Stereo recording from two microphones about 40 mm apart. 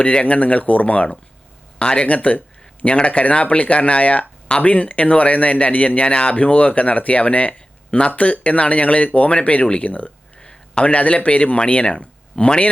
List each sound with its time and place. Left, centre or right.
0.0 s speech: left
1.8 s speech: left
2.0 s speech: left
2.8 s speech: left
10.4 s a sound: left
10.8 s speech: left